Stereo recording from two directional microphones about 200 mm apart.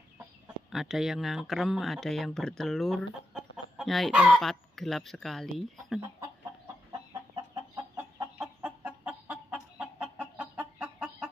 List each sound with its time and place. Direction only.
0.7 s speech: centre (ahead or behind)
6.9 s chicken: 20° right (ahead or behind); by 11.2 s 5° right (ahead or behind)